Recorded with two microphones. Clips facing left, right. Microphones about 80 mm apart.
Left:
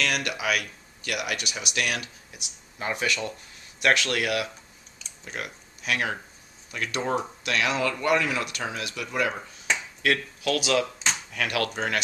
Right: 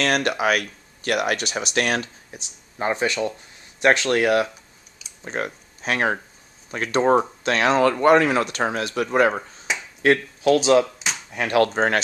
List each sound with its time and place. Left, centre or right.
0.0 s speech: right
9.7 s finger snapping: centre
10.0 s speech: right